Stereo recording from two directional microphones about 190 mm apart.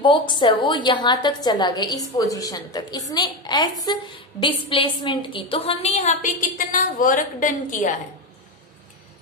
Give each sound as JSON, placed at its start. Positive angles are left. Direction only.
{"t": 0.0, "sound": "a woman's voice", "side_deg": 25}